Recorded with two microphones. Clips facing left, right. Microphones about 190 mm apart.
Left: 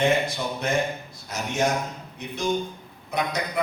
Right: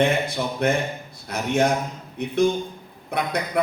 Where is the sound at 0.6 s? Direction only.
60° right (ahead or behind).